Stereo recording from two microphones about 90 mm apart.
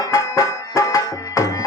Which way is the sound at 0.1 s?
35° left (ahead or behind).